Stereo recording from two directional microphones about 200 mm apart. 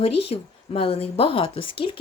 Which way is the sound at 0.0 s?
30° left (ahead or behind).